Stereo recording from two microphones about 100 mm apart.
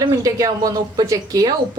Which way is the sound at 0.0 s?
40° right (ahead or behind).